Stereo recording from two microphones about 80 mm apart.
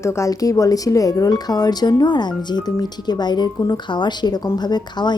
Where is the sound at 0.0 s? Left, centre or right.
Left.